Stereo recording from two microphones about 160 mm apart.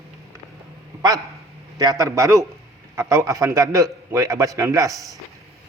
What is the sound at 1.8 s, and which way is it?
A man's voice, 20° right (ahead or behind).